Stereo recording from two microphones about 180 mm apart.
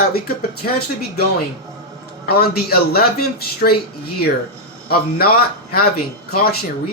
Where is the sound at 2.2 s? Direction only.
60° left (ahead or behind).